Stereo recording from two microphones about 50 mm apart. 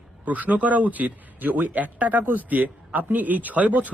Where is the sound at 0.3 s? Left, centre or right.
Right.